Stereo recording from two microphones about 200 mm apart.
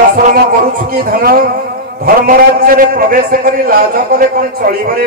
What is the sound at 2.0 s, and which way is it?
A man's voice, 45° right (ahead or behind).